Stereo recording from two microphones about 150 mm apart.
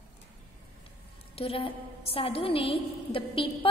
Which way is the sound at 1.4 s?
40° left (ahead or behind).